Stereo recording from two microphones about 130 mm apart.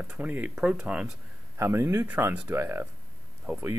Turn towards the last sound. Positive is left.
turn(degrees=-20)  # may be behind; listen again after turning